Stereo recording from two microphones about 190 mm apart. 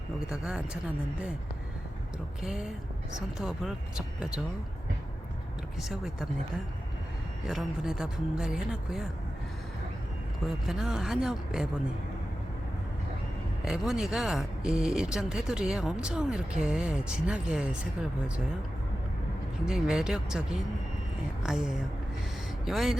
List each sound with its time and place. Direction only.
0.3 s speech: 5° right (ahead or behind)
2.4 s speech: centre (ahead or behind)
5.8 s speech: centre (ahead or behind)
7.4 s speech: 5° right (ahead or behind)
10.4 s speech: centre (ahead or behind)
13.7 s speech: 5° right (ahead or behind)
19.6 s speech: 5° right (ahead or behind)